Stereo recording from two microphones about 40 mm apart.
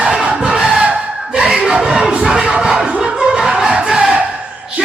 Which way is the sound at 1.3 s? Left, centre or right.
Right.